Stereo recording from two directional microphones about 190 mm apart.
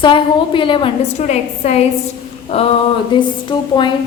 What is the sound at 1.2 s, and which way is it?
Speech, 35° left (ahead or behind).